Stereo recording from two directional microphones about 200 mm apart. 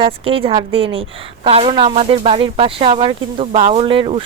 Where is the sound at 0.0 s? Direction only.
30° right (ahead or behind).